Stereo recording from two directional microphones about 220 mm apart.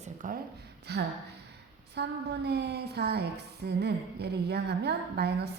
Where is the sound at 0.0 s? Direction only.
35° right (ahead or behind).